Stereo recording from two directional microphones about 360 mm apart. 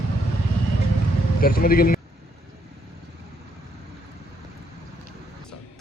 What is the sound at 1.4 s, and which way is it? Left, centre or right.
Speech, left.